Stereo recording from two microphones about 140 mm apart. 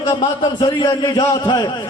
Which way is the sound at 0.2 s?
35° left (ahead or behind).